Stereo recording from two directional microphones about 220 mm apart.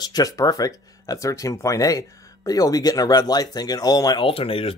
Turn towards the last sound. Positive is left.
turn(degrees=25)  # may be behind; listen again after turning